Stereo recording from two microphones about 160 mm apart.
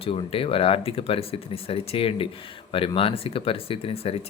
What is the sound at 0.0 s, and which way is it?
Speech, 35° left (ahead or behind).